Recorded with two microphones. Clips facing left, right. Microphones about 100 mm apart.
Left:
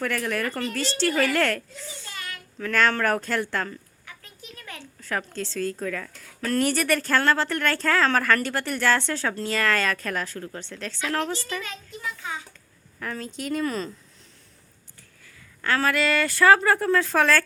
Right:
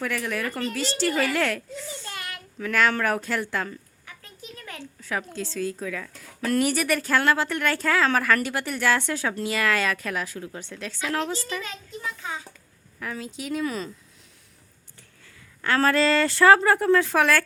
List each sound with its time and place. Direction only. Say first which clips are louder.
0.0 s speech: left 1 dB; 5° right (ahead or behind)
4.2 s a sound: right 6 dB; 25° right (ahead or behind)
4.9 s speech: left 1 dB; 5° right (ahead or behind)
11.6 s a child's voice: even; 25° right (ahead or behind)
13.0 s speech: left 1 dB; 5° right (ahead or behind)
15.8 s speech: right 4 dB; 30° right (ahead or behind); by 17.4 s 15° right (ahead or behind)